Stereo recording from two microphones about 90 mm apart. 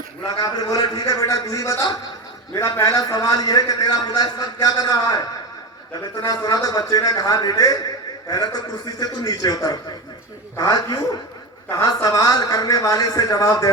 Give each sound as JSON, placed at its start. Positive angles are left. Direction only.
{"t": 0.3, "sound": "a man's voice", "side_deg": 50}
{"t": 6.2, "sound": "a man's voice", "side_deg": 45}
{"t": 12.0, "sound": "a man's voice", "side_deg": 45}